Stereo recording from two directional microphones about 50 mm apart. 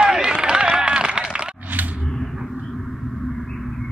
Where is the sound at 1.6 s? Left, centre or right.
Right.